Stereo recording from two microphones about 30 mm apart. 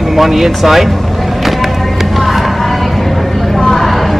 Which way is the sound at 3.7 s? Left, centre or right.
Centre.